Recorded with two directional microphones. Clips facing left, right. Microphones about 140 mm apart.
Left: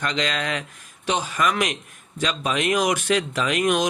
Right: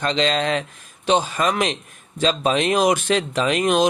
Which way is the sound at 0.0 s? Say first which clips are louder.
Right 5 dB; 30° right (ahead or behind).